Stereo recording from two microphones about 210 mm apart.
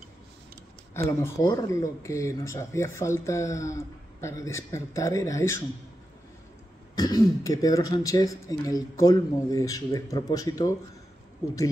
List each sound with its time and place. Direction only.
1.2 s speech: 20° left (ahead or behind)
7.0 s speech: 20° left (ahead or behind)